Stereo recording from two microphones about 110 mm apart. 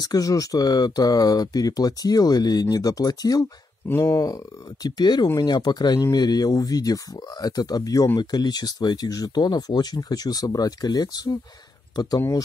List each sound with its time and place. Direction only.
0.0 s speech: 35° left (ahead or behind)
3.8 s speech: 25° left (ahead or behind)
4.8 s speech: 40° left (ahead or behind)
12.2 s speech: 25° left (ahead or behind)